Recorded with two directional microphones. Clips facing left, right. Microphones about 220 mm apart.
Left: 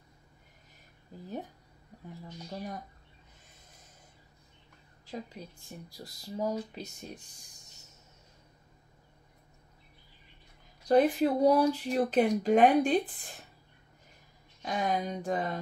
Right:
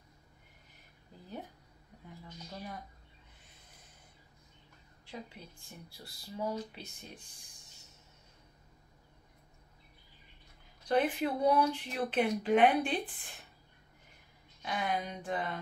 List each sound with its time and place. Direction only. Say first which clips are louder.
2.2 s speech: left 5 dB; 40° left (ahead or behind)
5.0 s speech: left 5 dB; 40° left (ahead or behind)
10.9 s speech: left 6 dB; 40° left (ahead or behind)
14.6 s speech: left 4 dB; 40° left (ahead or behind)